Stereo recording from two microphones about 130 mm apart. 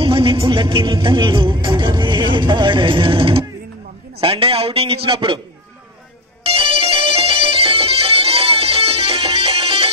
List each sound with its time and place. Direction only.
0.0 s a man's voice: 45° right (ahead or behind)
6.4 s music: 45° right (ahead or behind)